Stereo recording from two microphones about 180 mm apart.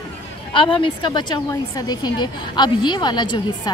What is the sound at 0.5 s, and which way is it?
A woman's voice, 30° left (ahead or behind).